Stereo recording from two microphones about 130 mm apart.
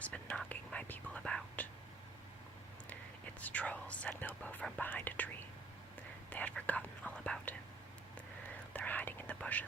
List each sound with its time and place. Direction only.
0.0 s whispering: 10° left (ahead or behind)
3.4 s whispering: 10° left (ahead or behind)
6.3 s whispering: 10° left (ahead or behind)
8.7 s whispering: 10° left (ahead or behind)